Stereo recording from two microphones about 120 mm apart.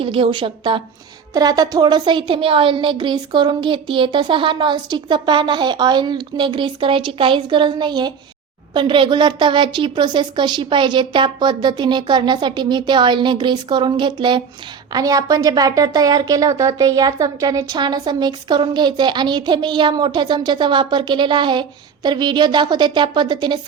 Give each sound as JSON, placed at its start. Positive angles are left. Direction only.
{"t": 0.0, "sound": "a woman's voice", "side_deg": -45}
{"t": 1.3, "sound": "a woman's voice", "side_deg": -35}
{"t": 14.9, "sound": "a woman's voice", "side_deg": -30}